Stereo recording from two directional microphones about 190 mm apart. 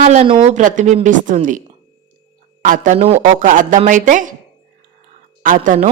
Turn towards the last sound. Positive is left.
turn(degrees=-45)  # may be behind; listen again after turning